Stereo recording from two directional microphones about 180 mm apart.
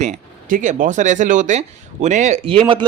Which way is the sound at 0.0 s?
45° right (ahead or behind).